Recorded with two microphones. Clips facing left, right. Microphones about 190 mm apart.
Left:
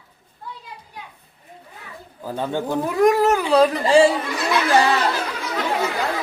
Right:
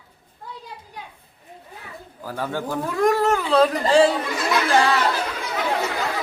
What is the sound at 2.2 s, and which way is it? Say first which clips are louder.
Speech: left 3 dB; 20° left (ahead or behind).